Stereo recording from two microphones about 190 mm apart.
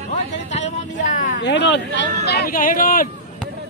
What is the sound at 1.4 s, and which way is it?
Speech, 65° left (ahead or behind).